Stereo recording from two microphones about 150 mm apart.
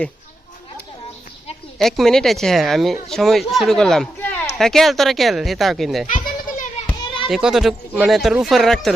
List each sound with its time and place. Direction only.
1.8 s speech: centre (ahead or behind)
6.1 s goat: 55° left (ahead or behind)
6.8 s children playing: 35° left (ahead or behind)
7.3 s speech: centre (ahead or behind)